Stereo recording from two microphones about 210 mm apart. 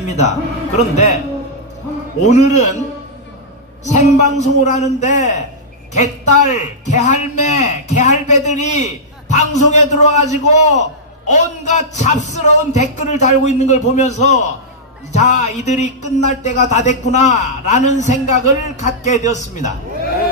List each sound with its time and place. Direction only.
0.0 s a man's voice: 35° left (ahead or behind)
2.2 s a man's voice: 35° left (ahead or behind)
3.8 s a man's voice: 35° left (ahead or behind)